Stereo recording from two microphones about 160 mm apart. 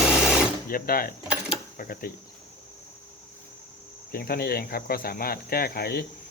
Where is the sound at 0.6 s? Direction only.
65° left (ahead or behind).